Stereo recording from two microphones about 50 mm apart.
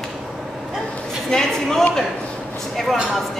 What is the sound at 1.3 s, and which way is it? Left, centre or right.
Speech, centre.